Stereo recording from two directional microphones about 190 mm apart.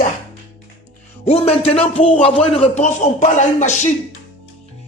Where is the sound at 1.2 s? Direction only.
30° left (ahead or behind).